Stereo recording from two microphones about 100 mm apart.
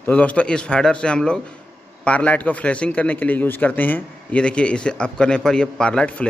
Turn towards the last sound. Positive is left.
turn(degrees=10)  # may be behind; listen again after turning